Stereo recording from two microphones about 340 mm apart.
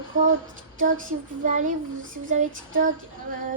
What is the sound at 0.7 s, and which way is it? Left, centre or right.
Speech, right.